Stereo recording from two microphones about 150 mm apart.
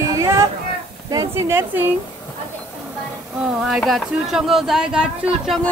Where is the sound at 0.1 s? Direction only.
20° right (ahead or behind).